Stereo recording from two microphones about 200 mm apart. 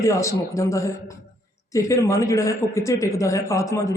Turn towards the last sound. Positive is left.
turn(degrees=15)  # may be behind; listen again after turning